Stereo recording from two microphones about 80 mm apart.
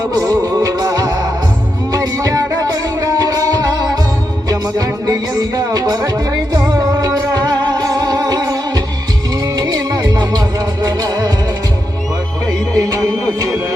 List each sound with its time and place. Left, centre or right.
0.1 s music: right
12.5 s music: right